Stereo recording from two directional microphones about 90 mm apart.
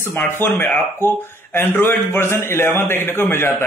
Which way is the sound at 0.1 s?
25° left (ahead or behind).